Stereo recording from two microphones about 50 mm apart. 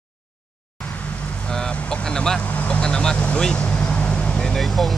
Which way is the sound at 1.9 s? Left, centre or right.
Centre.